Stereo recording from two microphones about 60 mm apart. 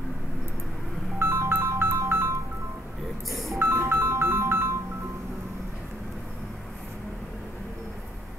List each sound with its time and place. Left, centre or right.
1.2 s music: right
3.3 s music: centre
3.5 s music: right